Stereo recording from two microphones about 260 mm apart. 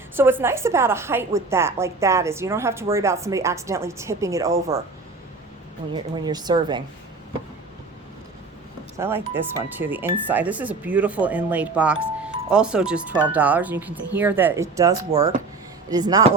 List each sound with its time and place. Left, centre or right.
0.2 s a woman's voice: centre
5.9 s a woman's voice: centre
9.0 s a woman's voice: centre